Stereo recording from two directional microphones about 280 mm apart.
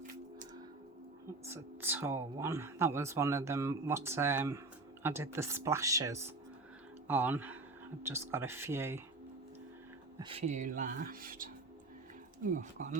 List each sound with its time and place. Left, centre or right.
1.5 s speech: centre
10.2 s speech: centre